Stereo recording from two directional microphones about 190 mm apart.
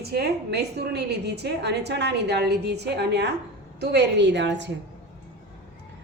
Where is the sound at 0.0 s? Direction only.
55° right (ahead or behind).